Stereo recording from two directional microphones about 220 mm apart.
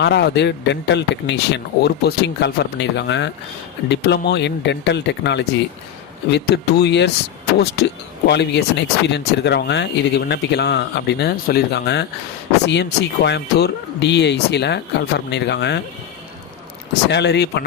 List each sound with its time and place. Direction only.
0.0 s speech: 50° left (ahead or behind)
17.1 s speech: 50° left (ahead or behind)